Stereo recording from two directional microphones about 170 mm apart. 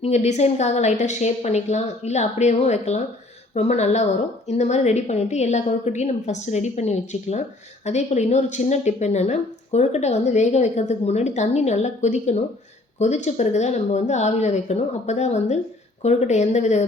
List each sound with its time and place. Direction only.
0.0 s speech: 40° left (ahead or behind)